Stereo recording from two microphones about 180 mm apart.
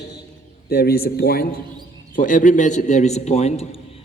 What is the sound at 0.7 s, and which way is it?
Speech, 60° left (ahead or behind).